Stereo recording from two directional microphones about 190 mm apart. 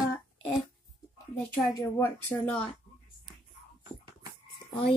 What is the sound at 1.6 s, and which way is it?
Speech, 15° left (ahead or behind).